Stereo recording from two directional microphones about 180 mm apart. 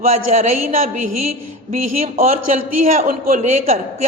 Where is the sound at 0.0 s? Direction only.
35° right (ahead or behind).